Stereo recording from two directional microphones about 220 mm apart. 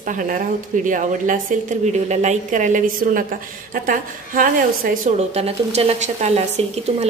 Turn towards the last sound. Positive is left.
turn(degrees=-30)  # may be behind; listen again after turning